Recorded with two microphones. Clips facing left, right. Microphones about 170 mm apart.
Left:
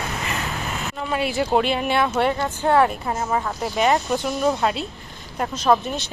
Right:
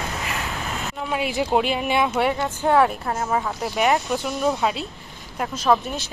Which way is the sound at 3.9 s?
Centre (ahead or behind).